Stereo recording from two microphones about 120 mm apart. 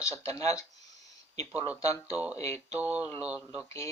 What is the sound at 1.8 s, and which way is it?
Speech, 30° left (ahead or behind).